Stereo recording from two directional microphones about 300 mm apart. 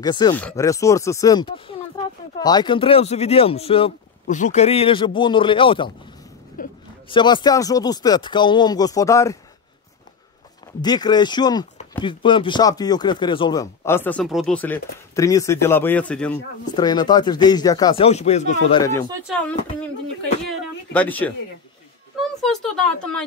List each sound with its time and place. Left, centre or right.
0.0 s speech: centre
6.6 s a sound: left
7.1 s speech: centre
10.8 s speech: centre
18.7 s speech: centre
22.4 s speech: centre